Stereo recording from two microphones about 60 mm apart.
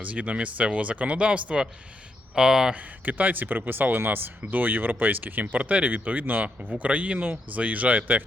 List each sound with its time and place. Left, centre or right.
0.0 s speech: right
2.7 s speech: right